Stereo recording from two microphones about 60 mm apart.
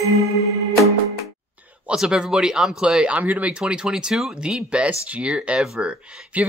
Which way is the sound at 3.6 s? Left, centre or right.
Centre.